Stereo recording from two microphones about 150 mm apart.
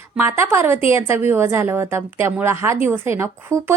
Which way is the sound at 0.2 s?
15° right (ahead or behind).